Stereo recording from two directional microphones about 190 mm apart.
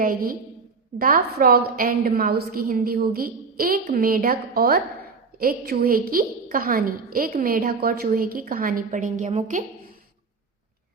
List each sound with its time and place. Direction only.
0.0 s a woman's voice: 50° right (ahead or behind)